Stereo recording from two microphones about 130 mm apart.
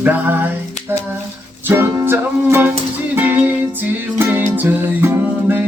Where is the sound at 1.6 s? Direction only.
15° right (ahead or behind).